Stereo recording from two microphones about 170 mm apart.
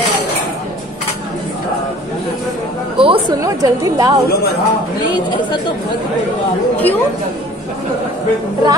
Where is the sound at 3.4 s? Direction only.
20° right (ahead or behind).